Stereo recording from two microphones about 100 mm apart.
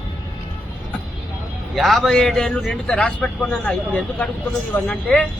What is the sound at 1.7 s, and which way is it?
A man's voice, centre (ahead or behind).